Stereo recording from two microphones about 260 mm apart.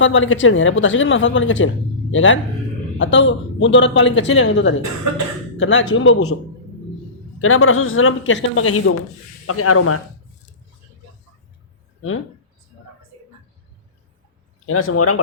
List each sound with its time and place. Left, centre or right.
0.0 s speech: left
7.4 s speech: left
14.7 s speech: left